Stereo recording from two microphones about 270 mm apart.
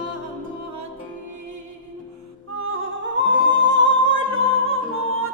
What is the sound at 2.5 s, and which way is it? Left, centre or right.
Music, right.